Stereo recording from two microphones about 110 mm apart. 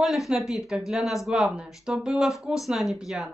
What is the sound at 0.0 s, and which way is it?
A woman's voice, centre (ahead or behind).